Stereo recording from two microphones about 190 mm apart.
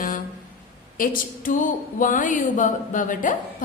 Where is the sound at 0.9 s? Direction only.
45° left (ahead or behind).